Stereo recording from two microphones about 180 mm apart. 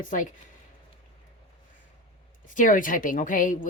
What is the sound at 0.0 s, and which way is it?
Speech, 50° left (ahead or behind).